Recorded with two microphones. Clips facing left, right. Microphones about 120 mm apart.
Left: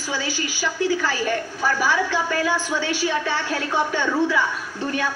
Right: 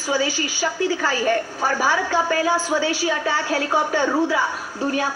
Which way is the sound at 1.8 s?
40° right (ahead or behind).